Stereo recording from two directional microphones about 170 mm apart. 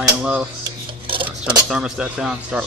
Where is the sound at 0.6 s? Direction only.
30° right (ahead or behind).